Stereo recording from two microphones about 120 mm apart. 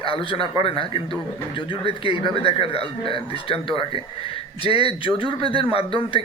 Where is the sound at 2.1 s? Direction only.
50° left (ahead or behind).